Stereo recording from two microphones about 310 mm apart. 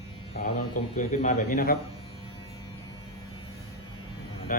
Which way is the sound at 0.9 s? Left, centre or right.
Left.